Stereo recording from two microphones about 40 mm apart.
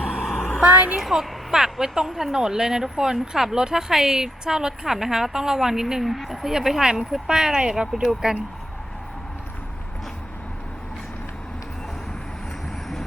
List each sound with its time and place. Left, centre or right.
0.0 s a sound: centre
0.6 s a woman's voice: right
0.9 s a woman's voice: centre